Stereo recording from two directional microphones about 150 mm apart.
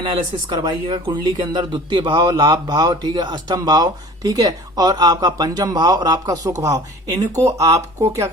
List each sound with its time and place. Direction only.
0.0 s speech: 30° right (ahead or behind)